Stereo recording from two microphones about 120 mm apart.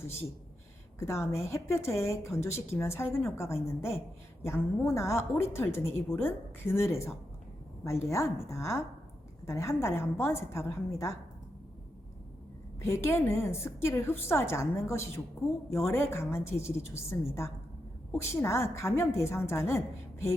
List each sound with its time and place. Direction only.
0.9 s a woman's voice: 25° left (ahead or behind)
12.8 s a woman's voice: 20° left (ahead or behind)